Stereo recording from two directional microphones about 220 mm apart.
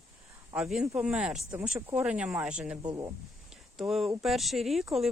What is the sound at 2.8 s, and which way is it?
Speech, 15° right (ahead or behind).